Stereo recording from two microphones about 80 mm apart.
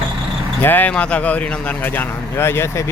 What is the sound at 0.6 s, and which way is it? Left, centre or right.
Speech, left.